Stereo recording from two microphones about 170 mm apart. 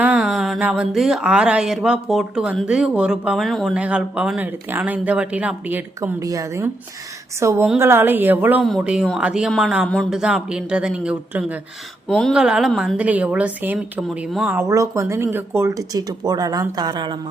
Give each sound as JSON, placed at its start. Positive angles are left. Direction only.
{"t": 0.0, "sound": "a woman's voice", "side_deg": -5}
{"t": 12.0, "sound": "speech", "side_deg": 0}
{"t": 14.6, "sound": "speech", "side_deg": -20}